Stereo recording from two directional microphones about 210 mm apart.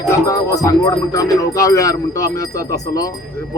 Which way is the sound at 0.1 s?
15° left (ahead or behind).